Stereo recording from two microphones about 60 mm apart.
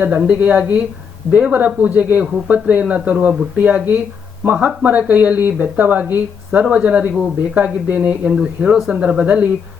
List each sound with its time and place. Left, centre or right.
0.0 s speech: right